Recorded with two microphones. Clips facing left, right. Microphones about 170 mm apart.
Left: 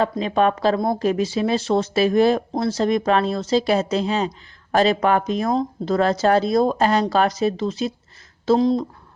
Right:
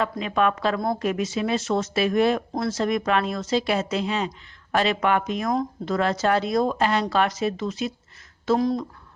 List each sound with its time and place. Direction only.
0.0 s speech: 30° left (ahead or behind)